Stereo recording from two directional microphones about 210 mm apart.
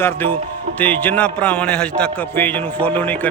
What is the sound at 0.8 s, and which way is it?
Music, 5° left (ahead or behind).